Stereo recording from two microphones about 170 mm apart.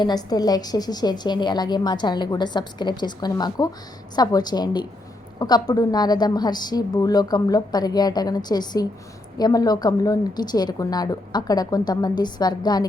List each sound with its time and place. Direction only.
0.0 s a woman's voice: 25° left (ahead or behind)